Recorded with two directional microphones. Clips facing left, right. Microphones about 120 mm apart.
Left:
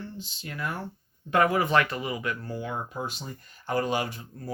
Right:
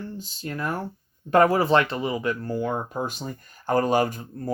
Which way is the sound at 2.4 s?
45° right (ahead or behind).